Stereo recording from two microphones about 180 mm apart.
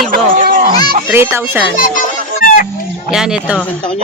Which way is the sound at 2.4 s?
50° left (ahead or behind).